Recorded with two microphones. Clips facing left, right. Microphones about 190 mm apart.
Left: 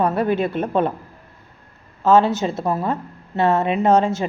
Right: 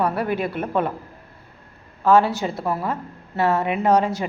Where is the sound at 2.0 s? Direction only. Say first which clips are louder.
Left 2 dB; 20° left (ahead or behind).